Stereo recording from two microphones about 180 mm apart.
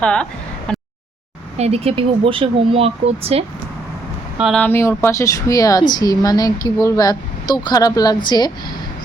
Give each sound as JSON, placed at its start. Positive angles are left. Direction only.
{"t": 0.0, "sound": "speech", "side_deg": 5}
{"t": 0.7, "sound": "a sound", "side_deg": 5}
{"t": 1.5, "sound": "speech", "side_deg": -35}
{"t": 4.4, "sound": "speech", "side_deg": -5}
{"t": 4.6, "sound": "speech", "side_deg": 15}